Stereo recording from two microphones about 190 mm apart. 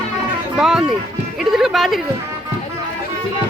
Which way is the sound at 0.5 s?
5° right (ahead or behind).